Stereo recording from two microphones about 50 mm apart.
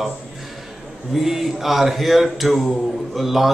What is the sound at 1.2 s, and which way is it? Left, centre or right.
A man's voice, centre.